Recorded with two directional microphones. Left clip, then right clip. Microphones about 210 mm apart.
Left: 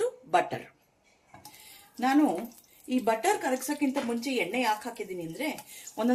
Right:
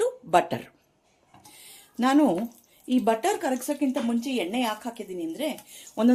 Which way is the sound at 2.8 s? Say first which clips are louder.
Right 3 dB; 50° right (ahead or behind).